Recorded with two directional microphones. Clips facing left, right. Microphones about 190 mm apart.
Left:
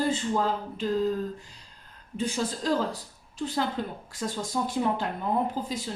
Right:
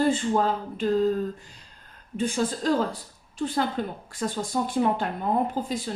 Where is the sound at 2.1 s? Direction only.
55° right (ahead or behind).